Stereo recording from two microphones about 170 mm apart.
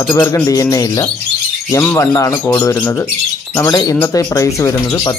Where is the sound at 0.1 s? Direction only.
15° left (ahead or behind).